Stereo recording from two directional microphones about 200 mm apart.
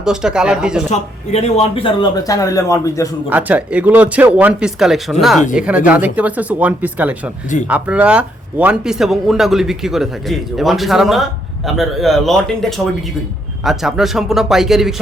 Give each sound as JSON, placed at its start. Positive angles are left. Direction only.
{"t": 0.0, "sound": "speech", "side_deg": -5}
{"t": 0.9, "sound": "speech", "side_deg": 35}
{"t": 3.2, "sound": "speech", "side_deg": -10}